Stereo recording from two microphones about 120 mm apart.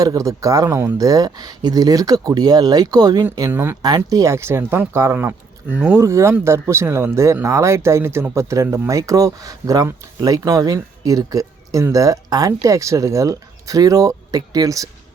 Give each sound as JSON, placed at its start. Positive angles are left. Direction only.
{"t": 0.0, "sound": "speech", "side_deg": -30}
{"t": 3.5, "sound": "speech", "side_deg": -20}
{"t": 3.8, "sound": "speech", "side_deg": -30}
{"t": 6.0, "sound": "speech", "side_deg": -25}